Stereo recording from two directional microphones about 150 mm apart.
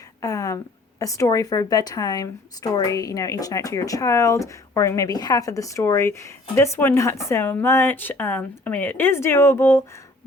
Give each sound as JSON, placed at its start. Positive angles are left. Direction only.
{"t": 0.2, "sound": "speech", "side_deg": 25}